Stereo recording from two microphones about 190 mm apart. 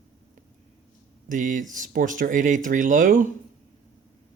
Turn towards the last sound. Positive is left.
turn(degrees=-40)  # may be behind; listen again after turning